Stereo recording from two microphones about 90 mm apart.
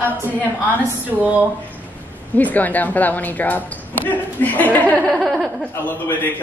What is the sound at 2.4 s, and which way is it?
A woman's voice, 20° left (ahead or behind).